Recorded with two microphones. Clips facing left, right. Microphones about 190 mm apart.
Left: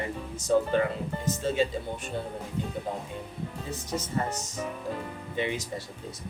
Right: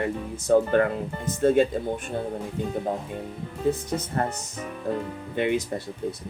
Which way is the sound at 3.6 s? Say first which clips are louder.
Right 10 dB; 55° right (ahead or behind).